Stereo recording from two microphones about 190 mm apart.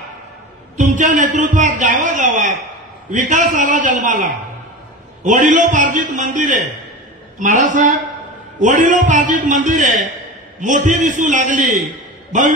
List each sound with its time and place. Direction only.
0.7 s a man's voice: 40° right (ahead or behind)